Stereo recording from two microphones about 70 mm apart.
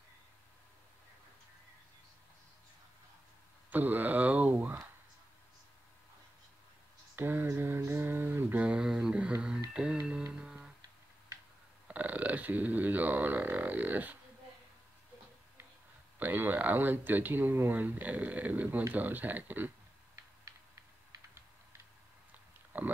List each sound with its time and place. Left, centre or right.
3.7 s speech: right
7.2 s speech: right
7.5 s music: right
8.0 s mantra: right
8.5 s a sound: centre
9.8 s speech: centre
10.3 s music: centre
11.9 s speech: right
16.2 s speech: right
20.4 s a sound: right
22.7 s speech: right